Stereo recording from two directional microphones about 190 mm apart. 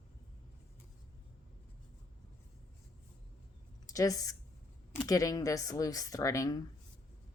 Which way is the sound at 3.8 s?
20° left (ahead or behind).